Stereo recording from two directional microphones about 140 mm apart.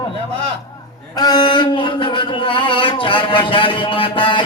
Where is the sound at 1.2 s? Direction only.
30° left (ahead or behind).